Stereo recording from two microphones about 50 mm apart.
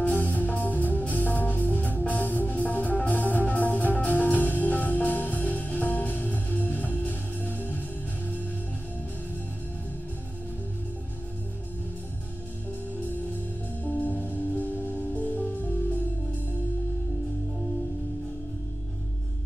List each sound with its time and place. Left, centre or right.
0.0 s music: left
13.8 s music: left